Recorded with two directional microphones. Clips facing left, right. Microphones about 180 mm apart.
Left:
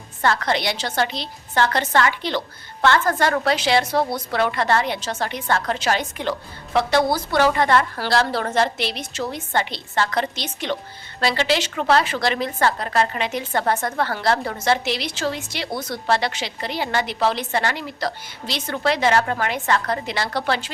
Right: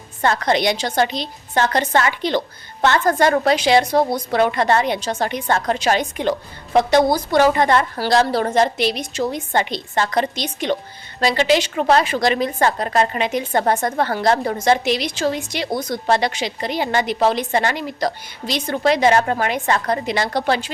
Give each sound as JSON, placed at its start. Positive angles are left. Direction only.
{"t": 0.2, "sound": "a woman's voice", "side_deg": -20}